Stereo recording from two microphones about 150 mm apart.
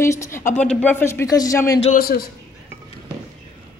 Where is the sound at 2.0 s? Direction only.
90° left.